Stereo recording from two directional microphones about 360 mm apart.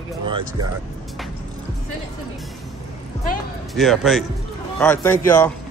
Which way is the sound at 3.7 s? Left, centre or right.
Centre.